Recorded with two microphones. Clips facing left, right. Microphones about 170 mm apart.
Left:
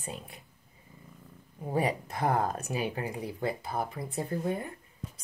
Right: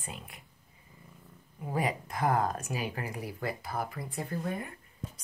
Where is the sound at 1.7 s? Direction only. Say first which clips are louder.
Left 3 dB; 30° left (ahead or behind).